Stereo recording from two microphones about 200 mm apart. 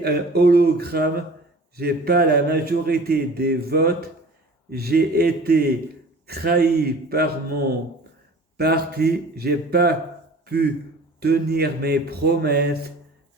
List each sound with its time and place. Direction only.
0.0 s a man's voice: 55° right (ahead or behind)
8.5 s a man's voice: 55° right (ahead or behind)